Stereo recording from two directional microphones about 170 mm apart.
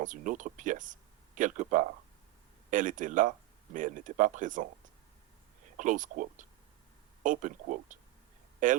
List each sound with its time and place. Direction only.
0.0 s speech: 50° right (ahead or behind)
5.7 s speech: 50° right (ahead or behind)